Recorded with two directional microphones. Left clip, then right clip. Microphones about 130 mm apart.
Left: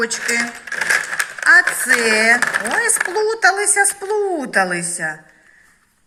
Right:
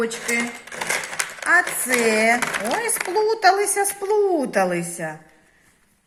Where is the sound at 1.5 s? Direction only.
35° right (ahead or behind).